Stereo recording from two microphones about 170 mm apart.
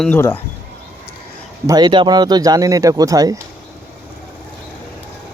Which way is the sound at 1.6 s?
25° right (ahead or behind).